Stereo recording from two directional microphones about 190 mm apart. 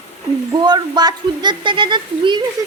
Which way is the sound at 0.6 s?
20° right (ahead or behind).